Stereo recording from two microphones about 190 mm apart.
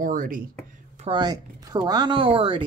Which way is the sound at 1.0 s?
25° right (ahead or behind).